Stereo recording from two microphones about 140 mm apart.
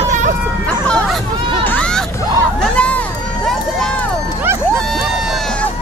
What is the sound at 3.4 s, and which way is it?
Run, 5° left (ahead or behind).